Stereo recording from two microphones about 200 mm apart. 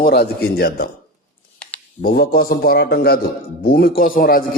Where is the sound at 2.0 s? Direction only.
50° left (ahead or behind).